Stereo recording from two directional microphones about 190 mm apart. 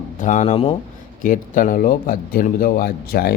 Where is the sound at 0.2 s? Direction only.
40° left (ahead or behind).